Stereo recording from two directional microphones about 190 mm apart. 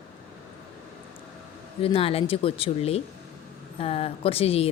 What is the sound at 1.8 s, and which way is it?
Speech, 30° left (ahead or behind).